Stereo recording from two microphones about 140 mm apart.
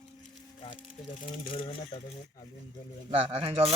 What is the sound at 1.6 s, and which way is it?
Speech, 35° left (ahead or behind).